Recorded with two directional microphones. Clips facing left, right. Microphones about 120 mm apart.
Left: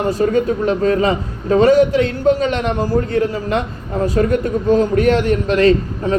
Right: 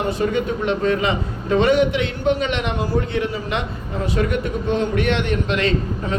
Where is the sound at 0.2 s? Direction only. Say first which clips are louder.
Left 5 dB; 40° left (ahead or behind).